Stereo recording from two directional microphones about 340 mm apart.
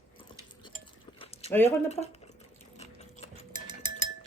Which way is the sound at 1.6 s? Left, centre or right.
Centre.